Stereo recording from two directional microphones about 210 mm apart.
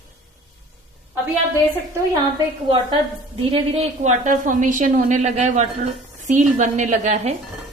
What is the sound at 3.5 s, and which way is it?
A woman's voice, 30° right (ahead or behind).